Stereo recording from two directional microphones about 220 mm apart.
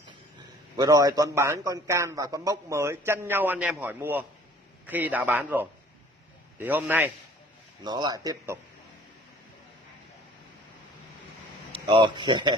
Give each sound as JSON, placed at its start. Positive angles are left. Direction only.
{"t": 0.7, "sound": "a man's voice", "side_deg": -15}
{"t": 7.8, "sound": "a man's voice", "side_deg": -20}
{"t": 11.7, "sound": "speech", "side_deg": -20}